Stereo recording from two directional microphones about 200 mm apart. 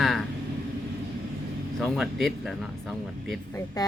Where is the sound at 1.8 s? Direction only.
Centre (ahead or behind).